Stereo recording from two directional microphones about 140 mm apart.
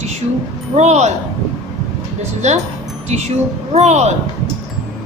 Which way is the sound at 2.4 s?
55° right (ahead or behind).